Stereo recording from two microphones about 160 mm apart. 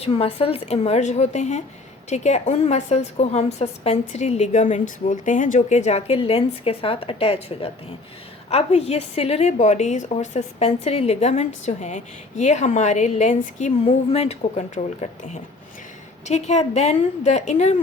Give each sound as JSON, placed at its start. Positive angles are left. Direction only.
{"t": 0.0, "sound": "a woman's voice", "side_deg": 40}
{"t": 16.2, "sound": "a woman's voice", "side_deg": 45}